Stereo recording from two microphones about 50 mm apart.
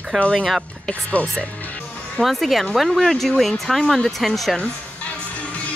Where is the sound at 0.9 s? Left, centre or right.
Left.